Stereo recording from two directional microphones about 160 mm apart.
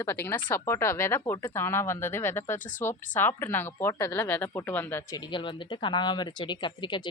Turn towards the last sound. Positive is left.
turn(degrees=30)  # may be behind; listen again after turning